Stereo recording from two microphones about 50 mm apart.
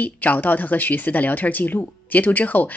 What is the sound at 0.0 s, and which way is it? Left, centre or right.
Speech, left.